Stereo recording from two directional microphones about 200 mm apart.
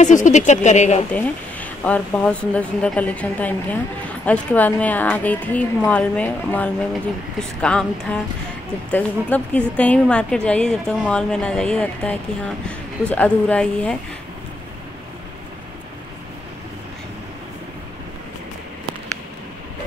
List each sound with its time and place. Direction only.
0.0 s speech: 40° left (ahead or behind)
1.1 s a woman's voice: 5° left (ahead or behind)